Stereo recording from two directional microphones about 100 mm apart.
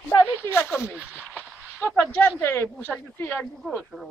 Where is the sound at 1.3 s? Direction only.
15° left (ahead or behind).